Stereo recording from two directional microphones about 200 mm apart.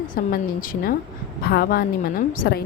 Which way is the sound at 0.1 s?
45° left (ahead or behind).